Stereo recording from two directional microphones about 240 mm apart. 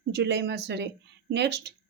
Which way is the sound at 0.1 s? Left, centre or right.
Right.